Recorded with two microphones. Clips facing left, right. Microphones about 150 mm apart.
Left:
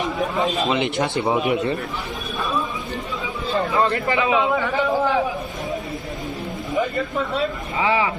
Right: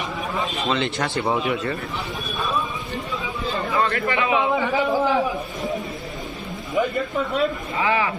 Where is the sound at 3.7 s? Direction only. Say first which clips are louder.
Left 1 dB; 25° left (ahead or behind).